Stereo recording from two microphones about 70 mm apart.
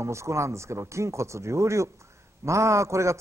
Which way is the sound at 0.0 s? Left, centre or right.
Right.